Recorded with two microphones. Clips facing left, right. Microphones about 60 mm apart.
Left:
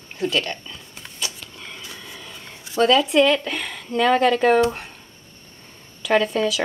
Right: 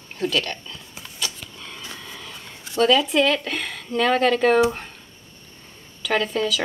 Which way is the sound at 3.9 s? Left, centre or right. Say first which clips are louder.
Left 2 dB; centre.